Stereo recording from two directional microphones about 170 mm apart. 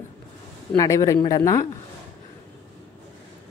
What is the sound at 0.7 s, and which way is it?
Speech, 20° left (ahead or behind).